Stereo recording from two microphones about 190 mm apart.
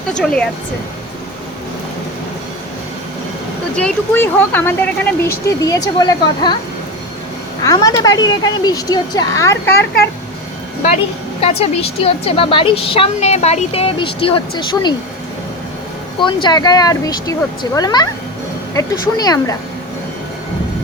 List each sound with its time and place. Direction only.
0.2 s speech: 5° left (ahead or behind)
3.8 s a woman's voice: 10° left (ahead or behind)
7.6 s a woman's voice: 20° left (ahead or behind)
10.8 s a woman's voice: 35° left (ahead or behind)
16.2 s a woman's voice: 25° left (ahead or behind)